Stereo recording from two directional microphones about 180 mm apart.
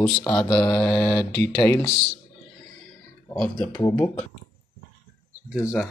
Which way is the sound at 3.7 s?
20° left (ahead or behind).